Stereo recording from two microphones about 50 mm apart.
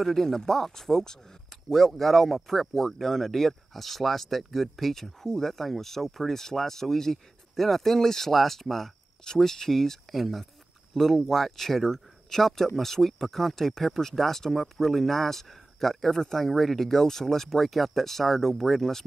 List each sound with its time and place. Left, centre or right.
0.0 s speech: centre